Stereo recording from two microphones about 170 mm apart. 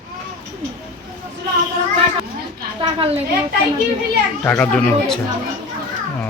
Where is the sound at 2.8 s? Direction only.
30° right (ahead or behind).